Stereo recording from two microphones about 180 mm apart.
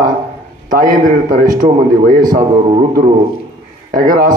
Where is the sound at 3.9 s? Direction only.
50° right (ahead or behind).